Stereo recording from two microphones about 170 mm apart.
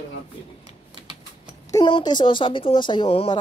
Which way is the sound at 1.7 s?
30° left (ahead or behind).